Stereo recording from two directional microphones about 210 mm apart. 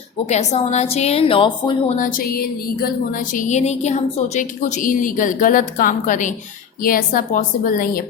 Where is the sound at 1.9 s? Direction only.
45° left (ahead or behind).